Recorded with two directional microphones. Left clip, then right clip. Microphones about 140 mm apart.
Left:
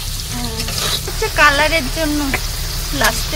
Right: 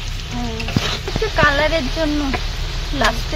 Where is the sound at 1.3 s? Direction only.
Centre (ahead or behind).